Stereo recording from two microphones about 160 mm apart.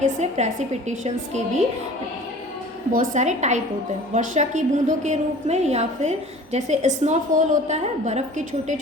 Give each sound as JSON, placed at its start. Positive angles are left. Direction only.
{"t": 0.0, "sound": "a woman's voice", "side_deg": -45}
{"t": 2.9, "sound": "a woman's voice", "side_deg": -50}